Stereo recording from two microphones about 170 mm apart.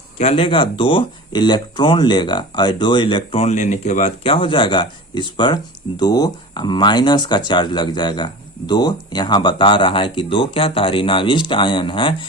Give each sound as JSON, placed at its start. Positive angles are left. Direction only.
{"t": 0.2, "sound": "speech", "side_deg": 35}